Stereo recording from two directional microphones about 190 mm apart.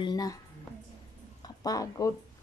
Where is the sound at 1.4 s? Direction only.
20° left (ahead or behind).